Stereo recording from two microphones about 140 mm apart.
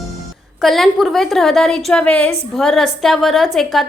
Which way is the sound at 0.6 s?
Centre (ahead or behind).